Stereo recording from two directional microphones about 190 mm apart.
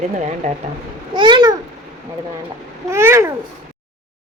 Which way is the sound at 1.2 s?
25° right (ahead or behind).